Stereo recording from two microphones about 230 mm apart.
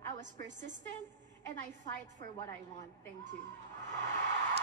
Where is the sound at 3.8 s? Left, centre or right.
Right.